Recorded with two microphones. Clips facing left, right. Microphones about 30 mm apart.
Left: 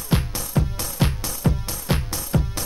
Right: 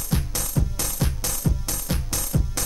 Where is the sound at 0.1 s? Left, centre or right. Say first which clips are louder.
Left 4 dB; left.